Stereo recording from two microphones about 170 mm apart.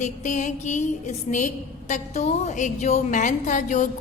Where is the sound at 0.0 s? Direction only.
45° left (ahead or behind).